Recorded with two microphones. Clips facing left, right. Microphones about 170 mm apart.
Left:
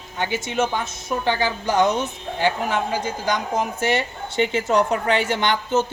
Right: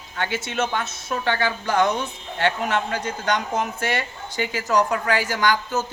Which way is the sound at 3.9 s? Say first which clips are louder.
Left 4 dB; 25° left (ahead or behind).